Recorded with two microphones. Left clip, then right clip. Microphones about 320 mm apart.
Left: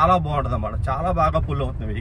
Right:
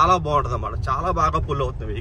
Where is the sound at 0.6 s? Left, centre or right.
Centre.